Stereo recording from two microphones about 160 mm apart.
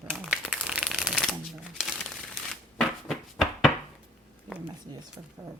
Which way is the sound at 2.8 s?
Centre (ahead or behind).